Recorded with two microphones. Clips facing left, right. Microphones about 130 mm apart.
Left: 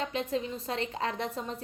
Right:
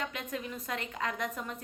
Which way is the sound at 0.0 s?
30° left (ahead or behind).